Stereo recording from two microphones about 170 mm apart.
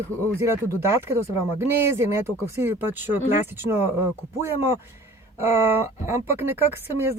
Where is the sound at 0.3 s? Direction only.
15° right (ahead or behind).